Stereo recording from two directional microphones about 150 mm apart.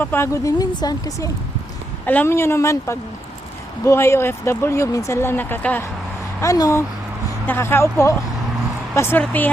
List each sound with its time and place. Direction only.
0.0 s speech: 15° left (ahead or behind)
2.0 s speech: 15° left (ahead or behind)